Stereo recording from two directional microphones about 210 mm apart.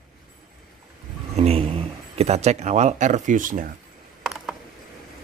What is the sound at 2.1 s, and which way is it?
A man's voice, 30° right (ahead or behind).